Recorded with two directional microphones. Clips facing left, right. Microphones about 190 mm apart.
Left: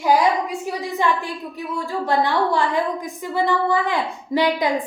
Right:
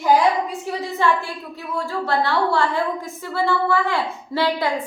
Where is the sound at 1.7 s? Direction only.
15° left (ahead or behind).